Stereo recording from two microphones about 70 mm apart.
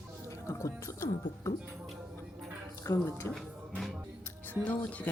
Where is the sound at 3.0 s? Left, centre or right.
Left.